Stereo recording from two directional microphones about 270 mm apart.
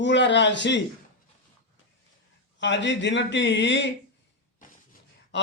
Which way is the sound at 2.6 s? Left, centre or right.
Left.